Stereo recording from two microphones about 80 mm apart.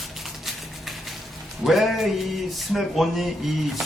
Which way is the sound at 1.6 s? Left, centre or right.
Centre.